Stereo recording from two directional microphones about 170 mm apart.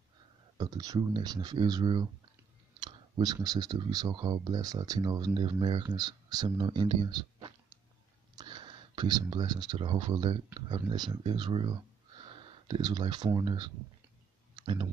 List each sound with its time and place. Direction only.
0.6 s speech: 20° right (ahead or behind)
2.8 s clicking: 25° right (ahead or behind)
3.3 s speech: 25° right (ahead or behind)
14.5 s clicking: 30° right (ahead or behind)